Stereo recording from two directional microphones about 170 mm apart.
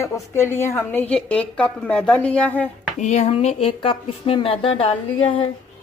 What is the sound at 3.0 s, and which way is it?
Speech, 45° left (ahead or behind).